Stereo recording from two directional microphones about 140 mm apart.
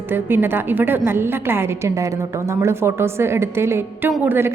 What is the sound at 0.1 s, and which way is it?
A woman's voice, 15° right (ahead or behind).